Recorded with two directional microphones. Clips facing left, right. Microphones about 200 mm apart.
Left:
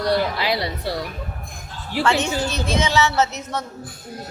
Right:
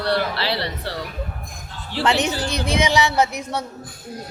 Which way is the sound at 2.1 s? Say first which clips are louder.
Right 1 dB; 20° right (ahead or behind).